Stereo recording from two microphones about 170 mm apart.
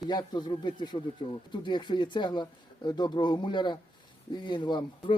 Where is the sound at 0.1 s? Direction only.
25° left (ahead or behind).